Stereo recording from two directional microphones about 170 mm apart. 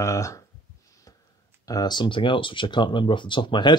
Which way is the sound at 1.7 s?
25° left (ahead or behind).